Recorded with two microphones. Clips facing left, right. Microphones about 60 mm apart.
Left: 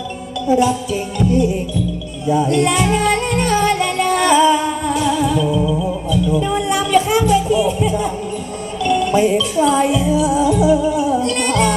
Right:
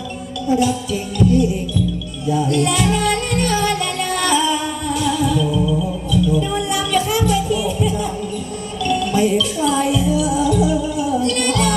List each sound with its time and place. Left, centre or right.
0.4 s music: left